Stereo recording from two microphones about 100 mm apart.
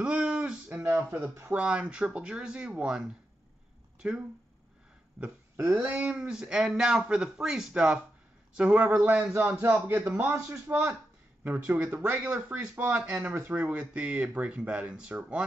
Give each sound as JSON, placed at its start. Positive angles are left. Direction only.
{"t": 0.0, "sound": "a sound", "side_deg": -10}
{"t": 0.9, "sound": "a man's voice", "side_deg": -15}
{"t": 5.8, "sound": "a man's voice", "side_deg": -15}
{"t": 9.3, "sound": "a man's voice", "side_deg": -20}